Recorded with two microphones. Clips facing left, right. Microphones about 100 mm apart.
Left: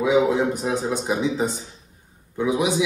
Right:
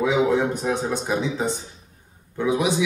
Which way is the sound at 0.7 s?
15° left (ahead or behind).